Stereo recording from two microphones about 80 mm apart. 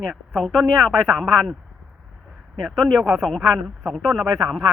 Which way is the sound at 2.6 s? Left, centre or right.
Centre.